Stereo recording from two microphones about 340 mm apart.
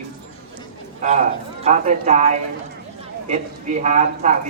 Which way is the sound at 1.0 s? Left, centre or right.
Right.